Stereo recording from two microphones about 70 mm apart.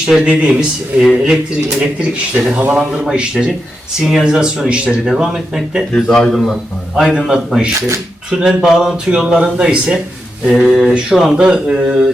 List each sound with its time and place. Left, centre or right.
0.3 s speech: centre
5.9 s speech: centre
6.3 s a man's voice: centre
7.1 s speech: centre